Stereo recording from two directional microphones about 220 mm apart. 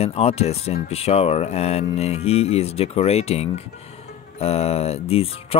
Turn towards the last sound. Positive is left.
turn(degrees=25)  # may be behind; listen again after turning